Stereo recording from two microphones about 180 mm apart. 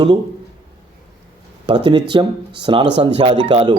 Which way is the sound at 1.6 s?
30° right (ahead or behind).